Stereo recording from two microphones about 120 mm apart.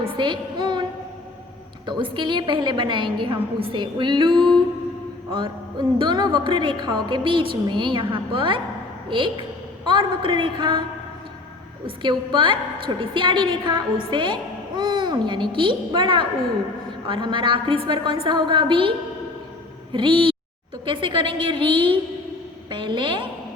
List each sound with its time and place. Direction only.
0.2 s a sound: 40° right (ahead or behind)
1.9 s a woman's voice: 40° right (ahead or behind)
11.9 s a woman's voice: 45° right (ahead or behind)